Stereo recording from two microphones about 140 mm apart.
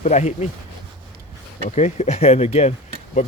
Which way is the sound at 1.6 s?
55° left (ahead or behind).